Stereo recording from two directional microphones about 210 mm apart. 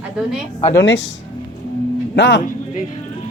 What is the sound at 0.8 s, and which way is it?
Speech, 60° left (ahead or behind).